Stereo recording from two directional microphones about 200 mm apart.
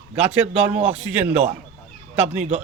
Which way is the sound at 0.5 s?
5° right (ahead or behind).